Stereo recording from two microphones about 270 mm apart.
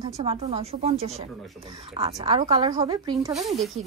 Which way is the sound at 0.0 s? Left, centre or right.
Right.